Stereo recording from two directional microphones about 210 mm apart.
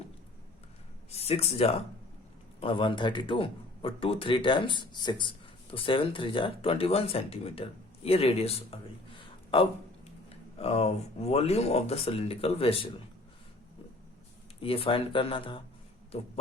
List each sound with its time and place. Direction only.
1.1 s speech: 30° left (ahead or behind)
14.6 s speech: 25° left (ahead or behind)